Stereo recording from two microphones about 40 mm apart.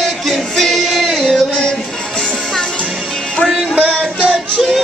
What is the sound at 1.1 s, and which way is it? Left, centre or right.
Music, centre.